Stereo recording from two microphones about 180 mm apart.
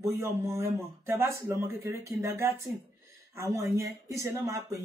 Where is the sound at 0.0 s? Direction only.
15° right (ahead or behind).